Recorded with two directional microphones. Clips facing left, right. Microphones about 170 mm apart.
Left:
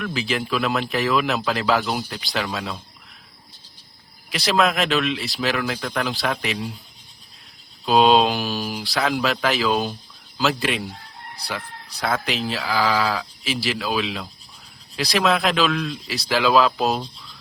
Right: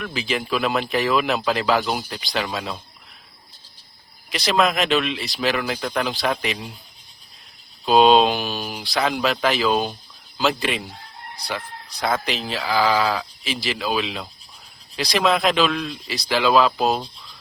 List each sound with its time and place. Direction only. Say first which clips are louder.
0.0 s speech: left 1 dB; centre (ahead or behind)
4.3 s speech: even; centre (ahead or behind)
7.9 s speech: right 1 dB; centre (ahead or behind)
12.0 s speech: even; 5° left (ahead or behind)